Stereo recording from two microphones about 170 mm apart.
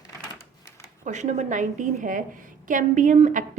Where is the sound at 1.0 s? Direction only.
45° right (ahead or behind).